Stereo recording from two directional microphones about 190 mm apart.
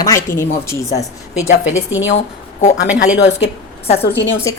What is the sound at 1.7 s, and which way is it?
Speech, 80° left.